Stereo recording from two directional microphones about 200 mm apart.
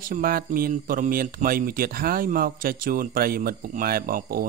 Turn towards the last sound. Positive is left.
turn(degrees=-45)  # may be behind; listen again after turning